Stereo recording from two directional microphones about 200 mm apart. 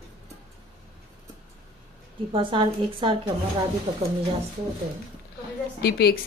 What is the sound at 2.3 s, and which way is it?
Speech, 25° right (ahead or behind).